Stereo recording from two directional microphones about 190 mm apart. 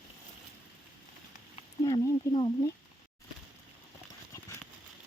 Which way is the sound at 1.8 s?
25° left (ahead or behind).